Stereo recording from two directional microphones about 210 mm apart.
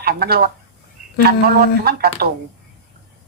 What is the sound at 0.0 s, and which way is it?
Speech, 45° right (ahead or behind).